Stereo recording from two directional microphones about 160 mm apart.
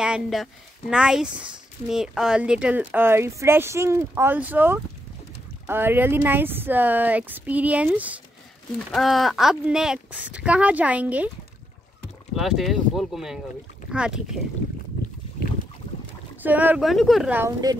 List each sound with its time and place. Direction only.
0.0 s speech: 5° right (ahead or behind)
12.4 s speech: centre (ahead or behind)
16.4 s speech: 10° right (ahead or behind)
16.8 s speech: centre (ahead or behind)
17.3 s speech: 15° right (ahead or behind)